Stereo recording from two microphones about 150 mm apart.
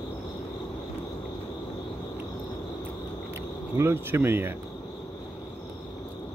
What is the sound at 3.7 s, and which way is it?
Speech, 15° right (ahead or behind).